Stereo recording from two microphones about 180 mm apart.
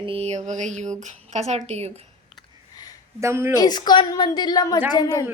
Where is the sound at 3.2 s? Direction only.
15° right (ahead or behind).